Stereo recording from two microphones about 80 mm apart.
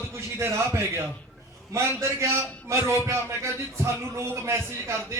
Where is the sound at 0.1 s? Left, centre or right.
Right.